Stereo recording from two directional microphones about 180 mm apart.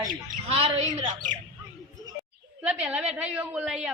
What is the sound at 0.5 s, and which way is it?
Speech, 35° right (ahead or behind).